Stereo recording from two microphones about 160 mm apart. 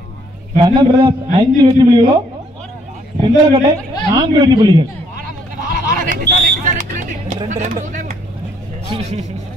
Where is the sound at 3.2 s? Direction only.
25° right (ahead or behind).